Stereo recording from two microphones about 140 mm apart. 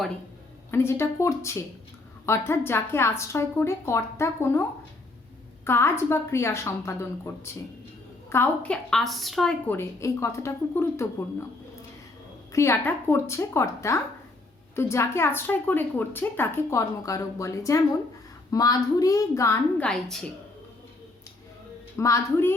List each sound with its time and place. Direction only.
0.7 s a woman's voice: 15° left (ahead or behind)
5.6 s a woman's voice: 15° left (ahead or behind); by 9.6 s centre (ahead or behind)
9.6 s a woman's voice: 20° left (ahead or behind)
12.5 s a woman's voice: 20° left (ahead or behind)
19.8 s a woman's voice: 5° left (ahead or behind)
21.9 s a woman's voice: 20° left (ahead or behind)